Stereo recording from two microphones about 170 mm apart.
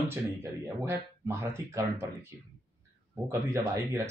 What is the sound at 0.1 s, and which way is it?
Speech, 15° right (ahead or behind).